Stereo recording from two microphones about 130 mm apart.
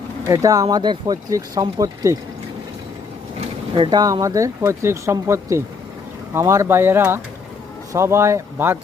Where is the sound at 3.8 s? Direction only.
30° right (ahead or behind).